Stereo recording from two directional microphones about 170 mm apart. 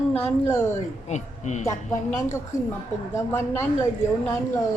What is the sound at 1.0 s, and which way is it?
Speech, 45° left (ahead or behind).